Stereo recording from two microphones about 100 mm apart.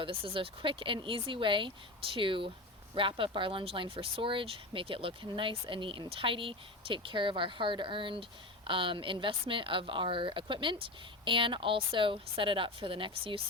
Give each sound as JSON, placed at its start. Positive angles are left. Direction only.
{"t": 0.0, "sound": "speech", "side_deg": -65}